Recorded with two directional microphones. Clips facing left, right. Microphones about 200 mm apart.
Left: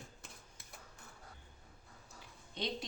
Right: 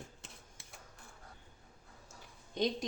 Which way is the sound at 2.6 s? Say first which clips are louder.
Right 8 dB; 45° right (ahead or behind).